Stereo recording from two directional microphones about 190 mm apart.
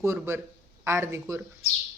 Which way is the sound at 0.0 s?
15° right (ahead or behind).